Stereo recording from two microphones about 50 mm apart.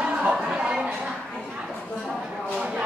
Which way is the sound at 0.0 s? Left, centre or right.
Centre.